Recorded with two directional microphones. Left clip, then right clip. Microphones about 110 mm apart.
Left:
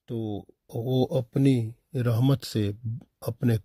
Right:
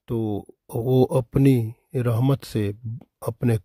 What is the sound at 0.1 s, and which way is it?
Speech, 70° right (ahead or behind).